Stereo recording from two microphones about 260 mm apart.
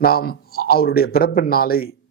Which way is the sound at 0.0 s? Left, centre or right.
Left.